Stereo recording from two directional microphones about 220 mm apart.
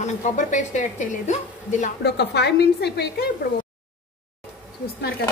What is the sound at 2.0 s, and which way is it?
A woman's voice, 50° left (ahead or behind).